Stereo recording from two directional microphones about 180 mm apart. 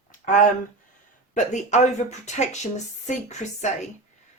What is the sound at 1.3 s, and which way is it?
Speech, 40° left (ahead or behind).